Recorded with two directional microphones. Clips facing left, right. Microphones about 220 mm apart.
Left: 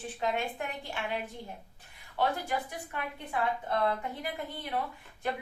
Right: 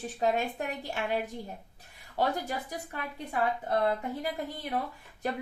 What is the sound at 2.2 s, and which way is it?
A woman's voice, 40° right (ahead or behind).